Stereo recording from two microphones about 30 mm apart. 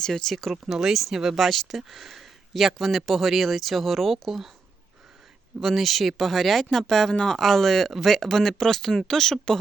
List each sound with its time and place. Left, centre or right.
0.0 s speech: centre
0.7 s speech: centre
1.1 s speech: centre
1.4 s speech: centre
5.5 s speech: centre